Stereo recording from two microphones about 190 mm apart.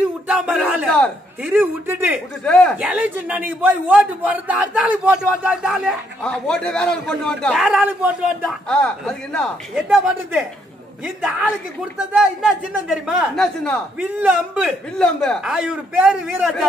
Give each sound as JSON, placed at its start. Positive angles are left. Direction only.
{"t": 0.3, "sound": "a man's voice", "side_deg": -5}
{"t": 0.8, "sound": "a man's voice", "side_deg": 5}
{"t": 1.4, "sound": "a man's voice", "side_deg": -10}
{"t": 2.4, "sound": "a man's voice", "side_deg": 5}
{"t": 2.8, "sound": "a man's voice", "side_deg": -5}
{"t": 9.8, "sound": "a man's voice", "side_deg": -5}
{"t": 15.0, "sound": "a man's voice", "side_deg": 5}